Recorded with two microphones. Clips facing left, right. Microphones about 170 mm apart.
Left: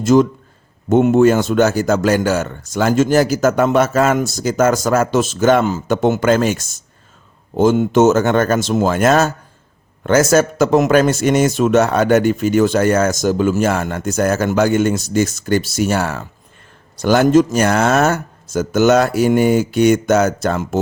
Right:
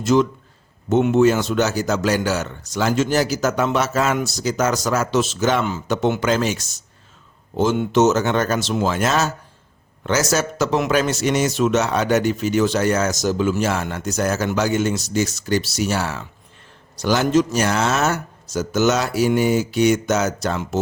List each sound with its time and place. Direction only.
0.0 s speech: 45° left (ahead or behind)